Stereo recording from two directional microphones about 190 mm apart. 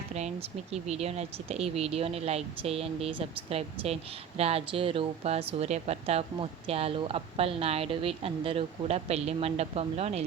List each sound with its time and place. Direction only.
0.1 s speech: 35° right (ahead or behind)